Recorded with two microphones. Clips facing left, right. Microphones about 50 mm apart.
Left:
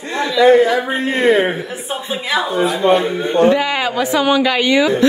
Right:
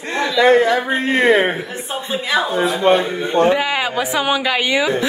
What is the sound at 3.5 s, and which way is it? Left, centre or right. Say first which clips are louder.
A woman's voice: left 1 dB; centre.